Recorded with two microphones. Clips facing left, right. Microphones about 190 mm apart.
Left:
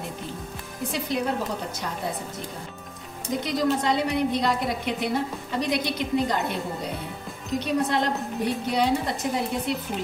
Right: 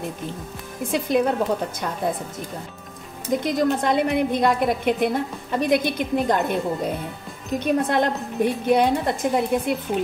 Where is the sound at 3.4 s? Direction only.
50° right (ahead or behind).